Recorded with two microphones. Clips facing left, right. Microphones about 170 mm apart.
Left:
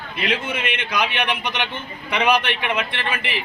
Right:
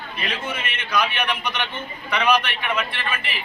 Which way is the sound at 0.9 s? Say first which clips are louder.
Right 2 dB; 15° left (ahead or behind).